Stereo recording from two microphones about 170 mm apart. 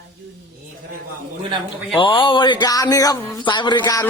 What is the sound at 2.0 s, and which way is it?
Speech, 30° left (ahead or behind).